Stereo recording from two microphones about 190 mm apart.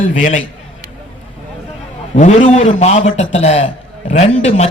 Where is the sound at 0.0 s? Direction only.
40° left (ahead or behind).